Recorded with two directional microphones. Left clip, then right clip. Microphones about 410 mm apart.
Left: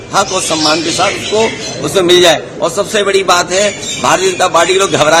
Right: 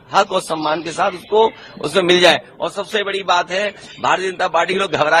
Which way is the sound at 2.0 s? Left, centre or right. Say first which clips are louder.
Left 5 dB; right.